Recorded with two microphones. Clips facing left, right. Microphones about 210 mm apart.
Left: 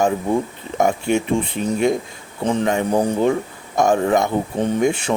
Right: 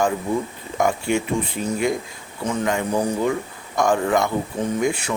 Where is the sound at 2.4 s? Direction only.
30° left (ahead or behind).